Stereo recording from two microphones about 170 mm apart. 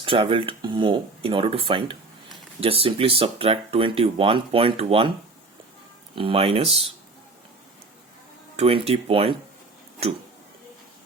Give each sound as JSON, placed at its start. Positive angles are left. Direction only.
{"t": 0.0, "sound": "speech", "side_deg": -30}
{"t": 6.1, "sound": "speech", "side_deg": -30}
{"t": 8.5, "sound": "speech", "side_deg": -35}